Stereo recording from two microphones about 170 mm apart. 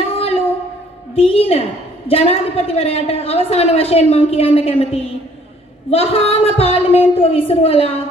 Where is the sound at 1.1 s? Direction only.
35° left (ahead or behind).